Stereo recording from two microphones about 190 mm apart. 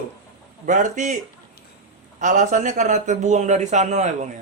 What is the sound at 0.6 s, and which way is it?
Speech, 40° right (ahead or behind).